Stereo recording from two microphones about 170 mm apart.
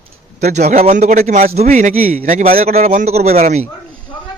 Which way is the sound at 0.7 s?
40° right (ahead or behind).